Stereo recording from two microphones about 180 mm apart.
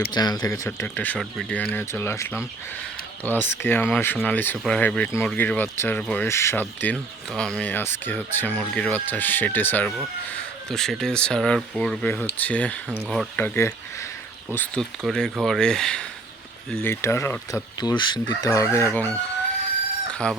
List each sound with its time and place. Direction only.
0.1 s speech: 20° left (ahead or behind)
17.7 s chicken: 25° left (ahead or behind)
20.2 s speech: 5° left (ahead or behind)